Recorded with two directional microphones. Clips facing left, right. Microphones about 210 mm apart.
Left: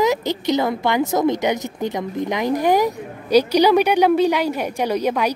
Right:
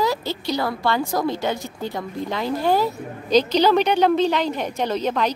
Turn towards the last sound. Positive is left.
turn(degrees=10)  # may be behind; listen again after turning